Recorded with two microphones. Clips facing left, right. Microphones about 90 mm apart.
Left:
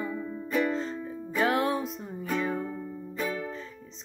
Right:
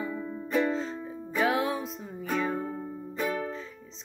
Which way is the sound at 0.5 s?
20° right (ahead or behind).